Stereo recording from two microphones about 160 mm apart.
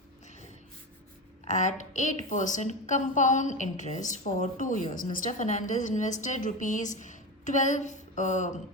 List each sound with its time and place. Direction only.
1.5 s a woman's voice: 50° left (ahead or behind)